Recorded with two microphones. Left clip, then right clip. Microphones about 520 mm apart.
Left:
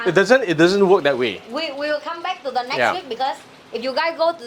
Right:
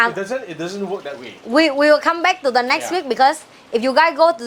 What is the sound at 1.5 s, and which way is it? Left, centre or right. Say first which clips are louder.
A woman's voice: right 10 dB; right.